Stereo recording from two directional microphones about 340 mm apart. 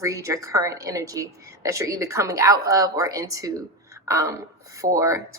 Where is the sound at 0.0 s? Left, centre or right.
Centre.